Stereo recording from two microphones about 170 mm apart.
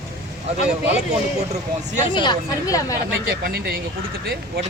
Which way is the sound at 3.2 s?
65° right (ahead or behind).